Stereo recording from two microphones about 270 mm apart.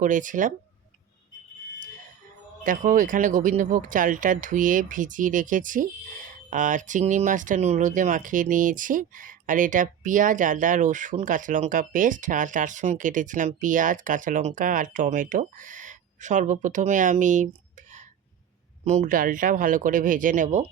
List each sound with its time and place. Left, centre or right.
0.0 s speech: right
2.6 s speech: right
18.9 s speech: right